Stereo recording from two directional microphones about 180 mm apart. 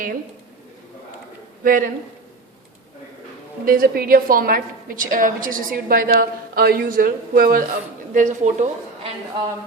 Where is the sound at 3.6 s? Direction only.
55° right (ahead or behind).